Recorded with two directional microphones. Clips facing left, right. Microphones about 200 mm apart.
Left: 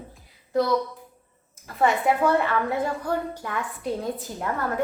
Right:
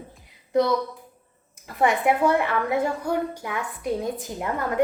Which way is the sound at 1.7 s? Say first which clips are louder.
Right 1 dB; 15° right (ahead or behind).